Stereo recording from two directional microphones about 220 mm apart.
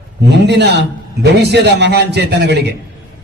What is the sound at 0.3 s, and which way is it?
A man's voice, 50° right (ahead or behind).